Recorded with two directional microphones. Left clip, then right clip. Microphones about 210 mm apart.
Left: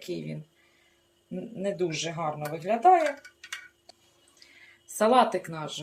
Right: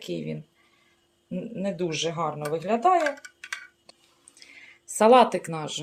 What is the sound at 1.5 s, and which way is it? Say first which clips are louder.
Speech: even; 35° right (ahead or behind).